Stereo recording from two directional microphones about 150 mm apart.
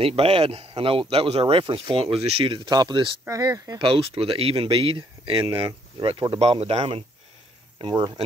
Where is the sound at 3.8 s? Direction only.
40° right (ahead or behind).